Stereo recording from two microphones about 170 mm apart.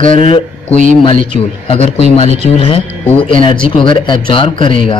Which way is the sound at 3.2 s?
30° left (ahead or behind).